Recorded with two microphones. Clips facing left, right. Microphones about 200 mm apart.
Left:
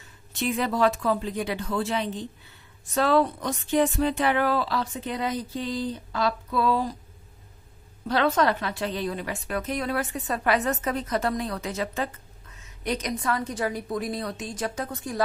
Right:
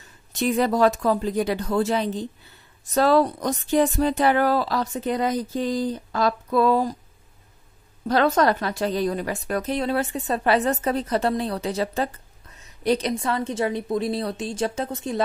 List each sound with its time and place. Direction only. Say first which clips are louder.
0.3 s speech: right 5 dB; 40° right (ahead or behind)
8.1 s a woman's voice: right 3 dB; 40° right (ahead or behind); by 15.2 s 25° right (ahead or behind)